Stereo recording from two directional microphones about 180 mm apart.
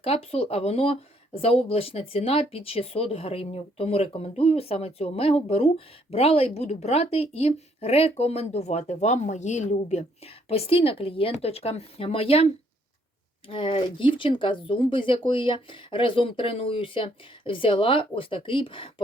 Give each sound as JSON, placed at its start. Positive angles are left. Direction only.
{"t": 0.0, "sound": "speech", "side_deg": 30}
{"t": 13.5, "sound": "speech", "side_deg": 30}